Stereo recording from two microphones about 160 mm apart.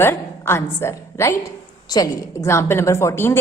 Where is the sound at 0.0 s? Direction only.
15° left (ahead or behind).